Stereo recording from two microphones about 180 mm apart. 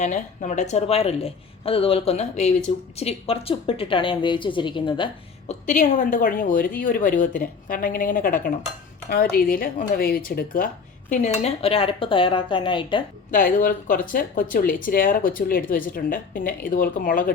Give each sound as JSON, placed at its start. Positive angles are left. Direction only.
{"t": 0.0, "sound": "speech", "side_deg": 40}
{"t": 5.5, "sound": "a woman's voice", "side_deg": 40}
{"t": 11.1, "sound": "speech", "side_deg": 40}
{"t": 13.3, "sound": "a woman's voice", "side_deg": 50}